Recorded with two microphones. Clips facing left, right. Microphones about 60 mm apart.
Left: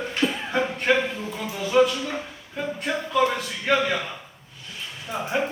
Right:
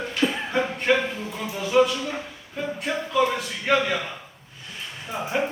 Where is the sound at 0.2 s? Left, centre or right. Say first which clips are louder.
Right 1 dB; centre.